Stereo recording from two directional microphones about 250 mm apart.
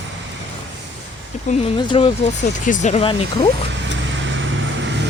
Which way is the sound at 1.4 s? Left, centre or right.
Left.